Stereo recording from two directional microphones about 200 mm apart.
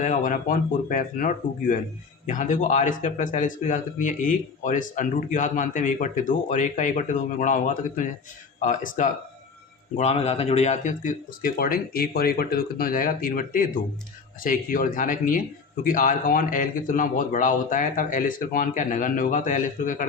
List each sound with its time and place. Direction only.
0.0 s speech: 40° left (ahead or behind)